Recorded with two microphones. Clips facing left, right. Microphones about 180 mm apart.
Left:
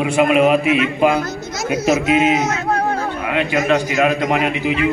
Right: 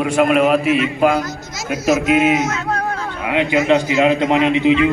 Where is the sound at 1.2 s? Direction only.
60° left (ahead or behind).